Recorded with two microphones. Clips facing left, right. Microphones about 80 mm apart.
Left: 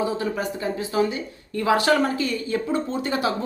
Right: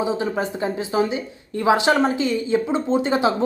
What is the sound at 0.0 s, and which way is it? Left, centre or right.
Speech, right.